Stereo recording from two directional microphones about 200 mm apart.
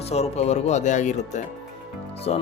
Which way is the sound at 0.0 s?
30° left (ahead or behind).